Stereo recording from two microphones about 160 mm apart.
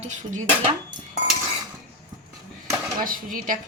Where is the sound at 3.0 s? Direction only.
60° right (ahead or behind).